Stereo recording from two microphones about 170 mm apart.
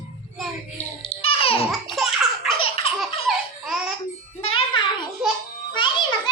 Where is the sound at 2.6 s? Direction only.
35° left (ahead or behind).